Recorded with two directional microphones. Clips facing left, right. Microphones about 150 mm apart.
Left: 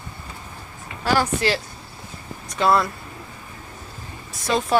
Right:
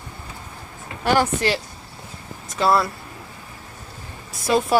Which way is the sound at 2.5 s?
5° right (ahead or behind).